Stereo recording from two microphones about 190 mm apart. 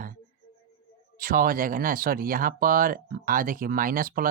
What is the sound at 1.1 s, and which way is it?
Speech, 50° right (ahead or behind).